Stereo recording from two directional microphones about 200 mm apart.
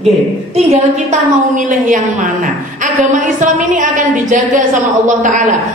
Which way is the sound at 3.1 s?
40° right (ahead or behind).